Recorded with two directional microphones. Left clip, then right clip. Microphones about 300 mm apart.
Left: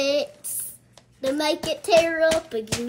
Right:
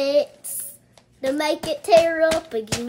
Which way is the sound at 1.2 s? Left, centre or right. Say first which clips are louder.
Right 1 dB; centre.